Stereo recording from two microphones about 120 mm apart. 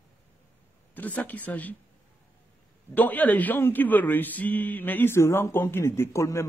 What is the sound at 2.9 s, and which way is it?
A man's voice, 15° left (ahead or behind).